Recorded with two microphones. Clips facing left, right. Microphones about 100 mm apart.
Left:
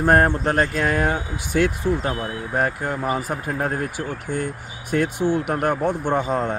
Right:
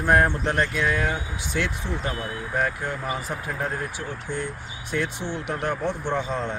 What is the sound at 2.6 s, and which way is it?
Speech, 45° left (ahead or behind).